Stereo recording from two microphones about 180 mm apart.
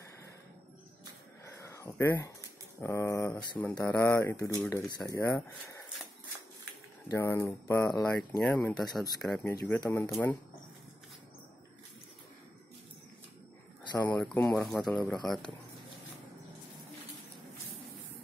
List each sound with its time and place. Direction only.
1.4 s a sound: 15° left (ahead or behind)
2.8 s speech: 15° left (ahead or behind)
7.1 s speech: 15° left (ahead or behind)
8.3 s speech: 5° left (ahead or behind)
9.5 s speech: 15° left (ahead or behind)
13.8 s speech: 25° left (ahead or behind)
14.2 s speech: 5° left (ahead or behind)